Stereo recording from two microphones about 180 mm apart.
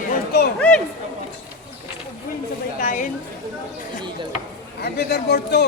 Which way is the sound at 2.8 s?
45° left (ahead or behind).